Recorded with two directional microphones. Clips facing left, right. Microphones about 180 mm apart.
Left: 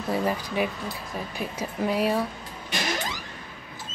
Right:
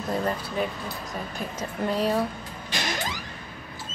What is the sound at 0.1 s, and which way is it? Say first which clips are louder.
Speech: left 2 dB; 5° left (ahead or behind).